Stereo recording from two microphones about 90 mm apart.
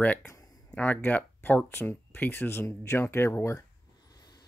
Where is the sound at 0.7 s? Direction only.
20° left (ahead or behind).